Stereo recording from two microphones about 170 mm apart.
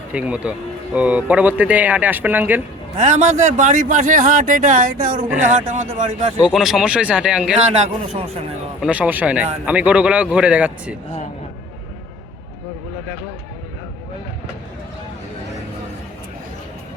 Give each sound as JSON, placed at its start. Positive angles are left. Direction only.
{"t": 0.1, "sound": "a man's voice", "side_deg": -5}
{"t": 3.0, "sound": "a man's voice", "side_deg": -45}
{"t": 6.4, "sound": "speech", "side_deg": 0}
{"t": 7.8, "sound": "speech", "side_deg": -35}
{"t": 8.8, "sound": "a man's voice", "side_deg": -5}